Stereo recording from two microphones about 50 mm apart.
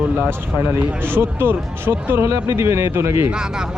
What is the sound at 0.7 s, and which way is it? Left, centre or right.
Speech, right.